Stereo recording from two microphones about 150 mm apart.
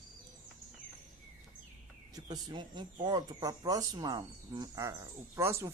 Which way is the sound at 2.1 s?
25° right (ahead or behind).